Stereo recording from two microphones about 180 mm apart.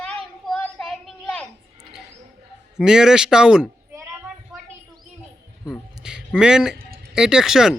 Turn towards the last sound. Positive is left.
turn(degrees=-5)  # may be behind; listen again after turning